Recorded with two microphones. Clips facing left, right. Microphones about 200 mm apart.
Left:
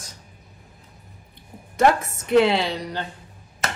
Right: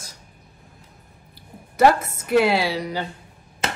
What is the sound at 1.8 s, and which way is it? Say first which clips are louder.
Speech: right 2 dB; centre (ahead or behind).